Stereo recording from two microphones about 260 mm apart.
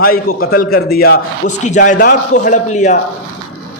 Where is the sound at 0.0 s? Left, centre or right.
Left.